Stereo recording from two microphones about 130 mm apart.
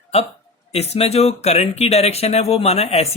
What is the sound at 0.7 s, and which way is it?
Speech, 55° left (ahead or behind).